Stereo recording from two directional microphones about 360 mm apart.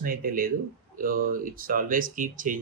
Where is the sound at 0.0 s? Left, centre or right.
Right.